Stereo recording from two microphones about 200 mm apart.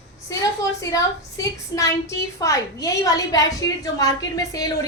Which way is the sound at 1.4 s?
15° left (ahead or behind).